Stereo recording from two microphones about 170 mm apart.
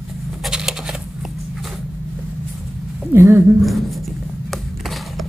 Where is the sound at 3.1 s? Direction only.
15° right (ahead or behind).